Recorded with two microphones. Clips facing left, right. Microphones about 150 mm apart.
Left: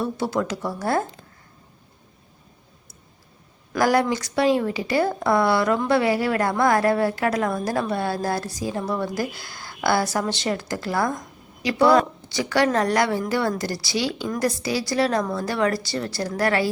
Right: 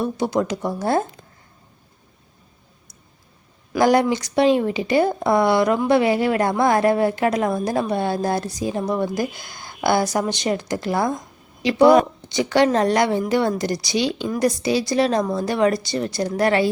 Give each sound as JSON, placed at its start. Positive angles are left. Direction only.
{"t": 0.0, "sound": "speech", "side_deg": -20}
{"t": 3.8, "sound": "speech", "side_deg": -20}